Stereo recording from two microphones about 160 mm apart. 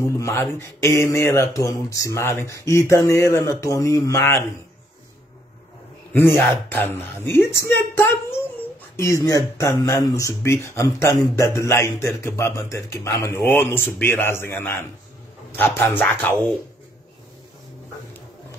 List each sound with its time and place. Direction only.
0.0 s speech: 20° left (ahead or behind)
6.1 s speech: 10° left (ahead or behind)